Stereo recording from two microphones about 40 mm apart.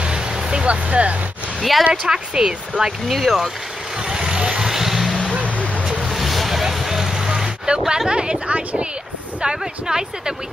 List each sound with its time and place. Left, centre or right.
0.0 s vehicle: right
1.6 s speech: centre
2.0 s speech: centre
3.1 s speech: centre
4.1 s vehicle: centre
6.0 s boat: centre
7.2 s a sound: right
8.1 s speech: right